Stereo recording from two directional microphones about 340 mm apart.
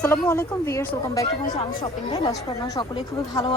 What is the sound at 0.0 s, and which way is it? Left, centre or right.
Speech, centre.